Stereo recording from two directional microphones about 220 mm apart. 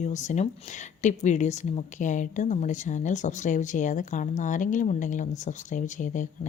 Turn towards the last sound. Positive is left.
turn(degrees=35)  # may be behind; listen again after turning